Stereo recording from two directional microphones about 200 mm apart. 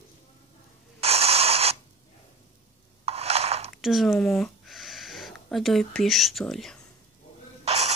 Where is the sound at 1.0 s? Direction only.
30° right (ahead or behind).